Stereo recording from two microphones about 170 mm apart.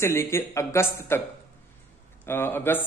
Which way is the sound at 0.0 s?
15° left (ahead or behind).